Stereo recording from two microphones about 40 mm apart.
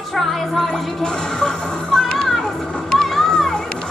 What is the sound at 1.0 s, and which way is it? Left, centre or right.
Music, centre.